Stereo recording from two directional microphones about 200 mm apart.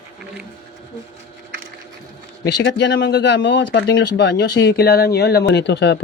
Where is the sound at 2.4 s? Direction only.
60° left (ahead or behind).